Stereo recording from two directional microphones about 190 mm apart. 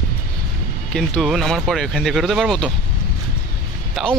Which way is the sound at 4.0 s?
Centre (ahead or behind).